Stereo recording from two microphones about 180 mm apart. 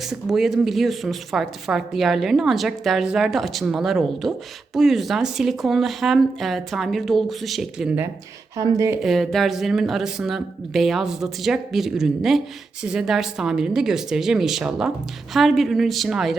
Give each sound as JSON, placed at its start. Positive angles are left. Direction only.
{"t": 0.1, "sound": "speech", "side_deg": 0}
{"t": 8.5, "sound": "speech", "side_deg": -20}
{"t": 9.0, "sound": "speech", "side_deg": 0}